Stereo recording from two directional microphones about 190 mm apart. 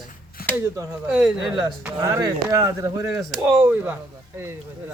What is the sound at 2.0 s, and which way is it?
Speech, 15° right (ahead or behind).